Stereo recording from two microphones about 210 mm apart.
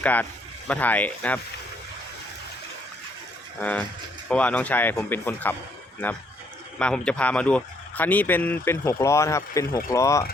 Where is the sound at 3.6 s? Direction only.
5° left (ahead or behind).